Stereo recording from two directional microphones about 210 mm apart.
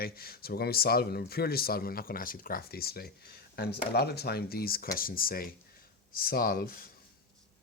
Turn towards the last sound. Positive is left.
turn(degrees=45)  # may be behind; listen again after turning